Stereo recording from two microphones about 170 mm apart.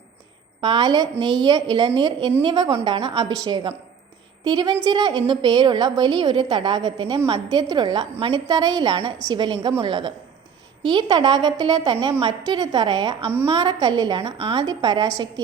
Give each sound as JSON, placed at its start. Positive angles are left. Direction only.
{"t": 0.6, "sound": "a woman's voice", "side_deg": -25}